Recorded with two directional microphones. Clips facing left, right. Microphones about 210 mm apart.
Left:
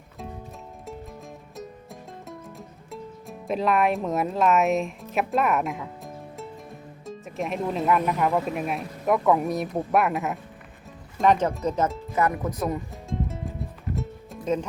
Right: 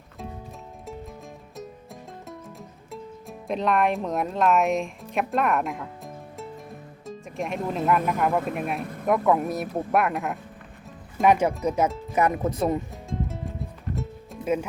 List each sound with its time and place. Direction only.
1.5 s music: centre (ahead or behind)
9.0 s speech: centre (ahead or behind)
11.2 s speech: 10° right (ahead or behind); by 12.8 s 25° right (ahead or behind)
12.9 s music: centre (ahead or behind)